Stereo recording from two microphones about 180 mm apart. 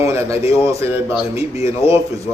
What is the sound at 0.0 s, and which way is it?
A man's voice, 15° right (ahead or behind).